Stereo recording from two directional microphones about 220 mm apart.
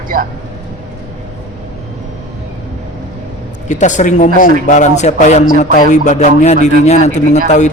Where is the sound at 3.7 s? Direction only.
35° left (ahead or behind).